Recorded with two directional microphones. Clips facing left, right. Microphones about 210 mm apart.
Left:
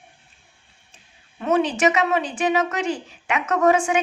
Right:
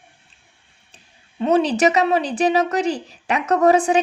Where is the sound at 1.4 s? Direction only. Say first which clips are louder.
Right 3 dB; 35° right (ahead or behind).